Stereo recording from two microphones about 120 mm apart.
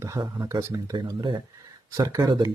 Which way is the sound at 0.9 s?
35° right (ahead or behind).